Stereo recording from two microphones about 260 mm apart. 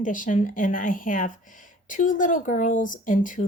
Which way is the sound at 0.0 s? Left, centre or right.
Left.